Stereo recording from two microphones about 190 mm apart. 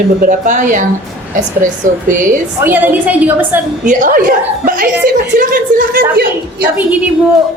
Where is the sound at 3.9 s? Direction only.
45° right (ahead or behind).